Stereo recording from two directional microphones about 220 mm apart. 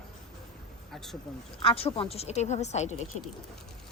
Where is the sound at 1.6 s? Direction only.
25° left (ahead or behind).